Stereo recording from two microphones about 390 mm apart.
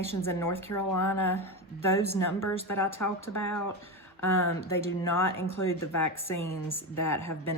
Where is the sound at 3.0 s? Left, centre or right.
Left.